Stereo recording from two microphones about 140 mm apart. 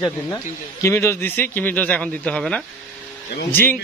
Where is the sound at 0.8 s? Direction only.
20° left (ahead or behind).